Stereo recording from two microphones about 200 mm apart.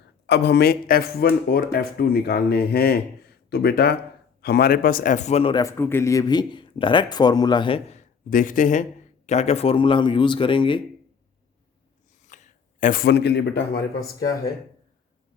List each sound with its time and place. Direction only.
0.3 s a man's voice: 60° left (ahead or behind); by 10.8 s 25° left (ahead or behind)
12.3 s speech: 40° left (ahead or behind)